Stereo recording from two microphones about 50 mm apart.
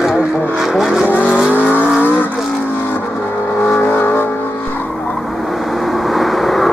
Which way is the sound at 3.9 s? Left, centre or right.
Left.